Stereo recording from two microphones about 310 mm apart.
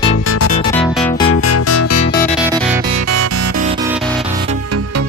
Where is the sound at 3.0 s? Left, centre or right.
Right.